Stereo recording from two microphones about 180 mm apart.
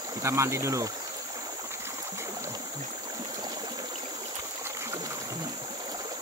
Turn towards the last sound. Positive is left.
turn(degrees=-15)  # may be behind; listen again after turning